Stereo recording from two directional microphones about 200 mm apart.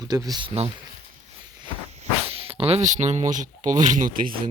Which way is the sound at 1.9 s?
30° right (ahead or behind).